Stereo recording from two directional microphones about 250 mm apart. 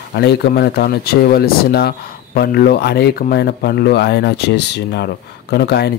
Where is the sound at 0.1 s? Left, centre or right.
Left.